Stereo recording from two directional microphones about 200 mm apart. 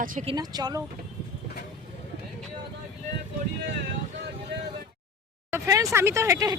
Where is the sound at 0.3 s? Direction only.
20° right (ahead or behind).